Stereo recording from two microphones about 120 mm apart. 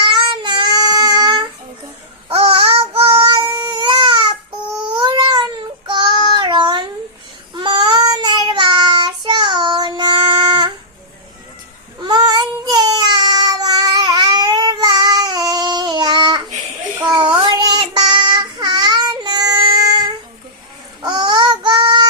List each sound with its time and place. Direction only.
0.0 s child singing: 40° right (ahead or behind)
2.3 s child singing: 50° right (ahead or behind)
3.6 s baby cry: 40° right (ahead or behind)
4.9 s a sound: 40° right (ahead or behind)
5.9 s child singing: 40° right (ahead or behind)
11.9 s child singing: 35° right (ahead or behind)